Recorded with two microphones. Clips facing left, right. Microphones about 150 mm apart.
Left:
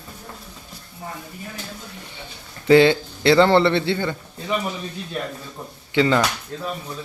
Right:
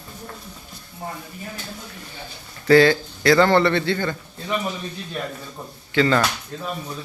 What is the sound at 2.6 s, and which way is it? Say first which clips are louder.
A man's voice: left 1 dB; 20° left (ahead or behind).